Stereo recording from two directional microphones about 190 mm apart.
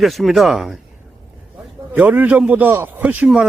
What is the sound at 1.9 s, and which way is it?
A man's voice, 10° right (ahead or behind).